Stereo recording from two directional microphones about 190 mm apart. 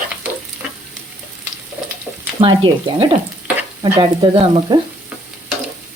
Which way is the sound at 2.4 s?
25° right (ahead or behind).